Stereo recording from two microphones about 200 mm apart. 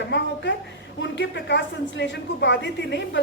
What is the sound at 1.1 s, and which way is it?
A woman's voice, 60° left (ahead or behind).